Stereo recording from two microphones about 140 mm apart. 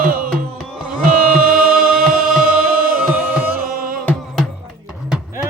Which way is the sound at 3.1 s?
10° right (ahead or behind).